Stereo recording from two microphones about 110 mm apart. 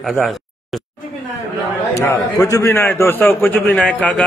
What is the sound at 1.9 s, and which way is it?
A man's voice, 20° left (ahead or behind).